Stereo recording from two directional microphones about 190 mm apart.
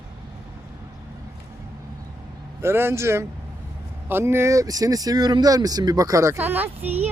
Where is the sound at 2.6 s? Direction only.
15° right (ahead or behind).